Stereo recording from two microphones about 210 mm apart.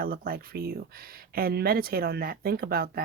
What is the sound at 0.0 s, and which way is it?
Speech, 45° right (ahead or behind).